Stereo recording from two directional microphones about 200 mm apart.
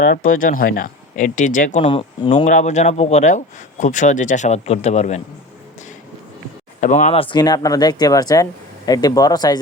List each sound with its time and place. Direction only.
0.0 s a man's voice: 40° left (ahead or behind); by 2.3 s 25° left (ahead or behind)
2.3 s a man's voice: 40° left (ahead or behind)
6.8 s speech: 35° left (ahead or behind); by 9.6 s 20° left (ahead or behind)